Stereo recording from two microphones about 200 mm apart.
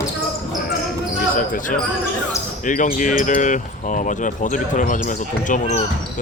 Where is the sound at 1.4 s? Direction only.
40° left (ahead or behind).